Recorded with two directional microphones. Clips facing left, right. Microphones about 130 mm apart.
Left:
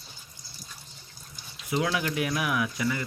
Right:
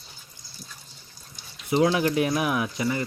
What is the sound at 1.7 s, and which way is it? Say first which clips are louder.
Speech: right 6 dB; 30° right (ahead or behind).